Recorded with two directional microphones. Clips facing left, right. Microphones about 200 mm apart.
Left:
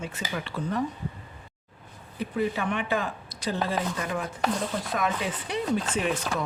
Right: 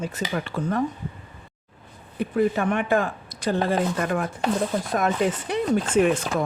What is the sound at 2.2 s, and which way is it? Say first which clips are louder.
Speech: right 6 dB; 50° right (ahead or behind).